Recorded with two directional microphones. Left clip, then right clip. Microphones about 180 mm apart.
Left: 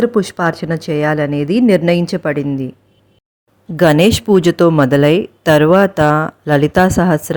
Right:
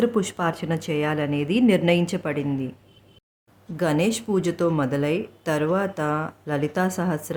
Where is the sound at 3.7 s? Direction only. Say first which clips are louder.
Left 13 dB; 45° left (ahead or behind).